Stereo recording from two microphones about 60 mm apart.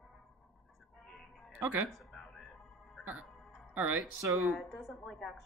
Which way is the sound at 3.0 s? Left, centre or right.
Right.